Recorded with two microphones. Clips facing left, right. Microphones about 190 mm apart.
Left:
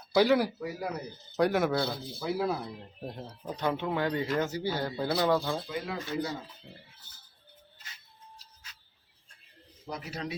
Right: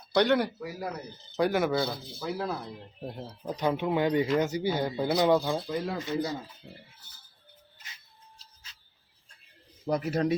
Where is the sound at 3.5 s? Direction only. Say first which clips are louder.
Right 3 dB; 15° right (ahead or behind).